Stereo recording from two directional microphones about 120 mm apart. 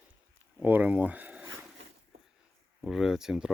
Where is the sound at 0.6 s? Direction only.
15° right (ahead or behind).